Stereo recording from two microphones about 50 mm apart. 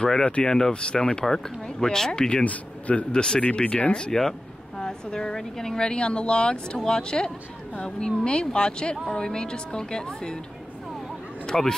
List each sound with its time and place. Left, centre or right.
0.0 s speech: centre
2.4 s speech: left
11.4 s speech: centre